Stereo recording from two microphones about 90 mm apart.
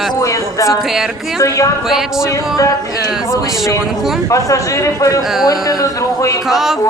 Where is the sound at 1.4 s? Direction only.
35° left (ahead or behind).